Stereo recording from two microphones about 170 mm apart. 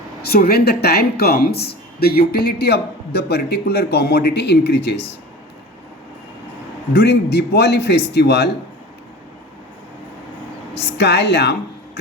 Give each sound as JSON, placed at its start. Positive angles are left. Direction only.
{"t": 0.2, "sound": "speech", "side_deg": 65}
{"t": 6.9, "sound": "speech", "side_deg": 75}
{"t": 10.9, "sound": "a woman's voice", "side_deg": 85}